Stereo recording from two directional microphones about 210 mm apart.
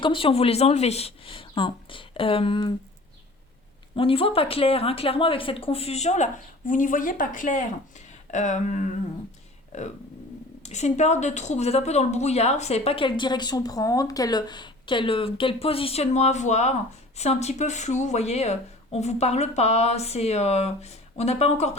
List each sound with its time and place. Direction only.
0.0 s a woman's voice: 25° left (ahead or behind)
3.9 s speech: 25° left (ahead or behind)
10.6 s a woman's voice: 35° left (ahead or behind)